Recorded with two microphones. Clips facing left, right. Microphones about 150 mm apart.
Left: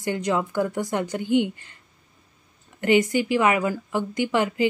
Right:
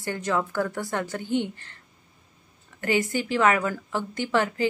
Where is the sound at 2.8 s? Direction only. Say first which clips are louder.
Left 5 dB; 20° left (ahead or behind).